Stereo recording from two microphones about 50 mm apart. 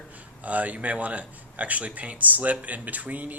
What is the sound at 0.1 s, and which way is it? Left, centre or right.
Speech, right.